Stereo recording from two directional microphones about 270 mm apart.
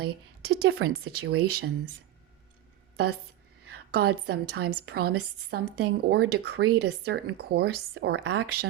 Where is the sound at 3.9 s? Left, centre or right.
Right.